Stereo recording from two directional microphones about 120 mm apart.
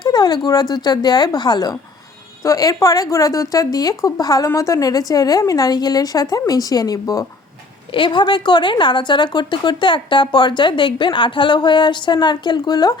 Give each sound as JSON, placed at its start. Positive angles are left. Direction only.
{"t": 0.0, "sound": "speech", "side_deg": 35}
{"t": 7.9, "sound": "speech", "side_deg": 45}